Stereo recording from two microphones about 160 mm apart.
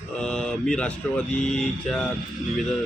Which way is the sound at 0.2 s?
5° left (ahead or behind).